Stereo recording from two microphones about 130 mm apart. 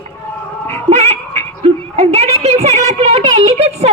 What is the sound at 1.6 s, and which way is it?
A woman's voice, 50° right (ahead or behind).